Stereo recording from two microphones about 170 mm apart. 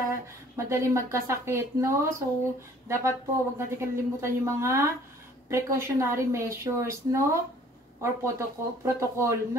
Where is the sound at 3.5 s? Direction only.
15° right (ahead or behind).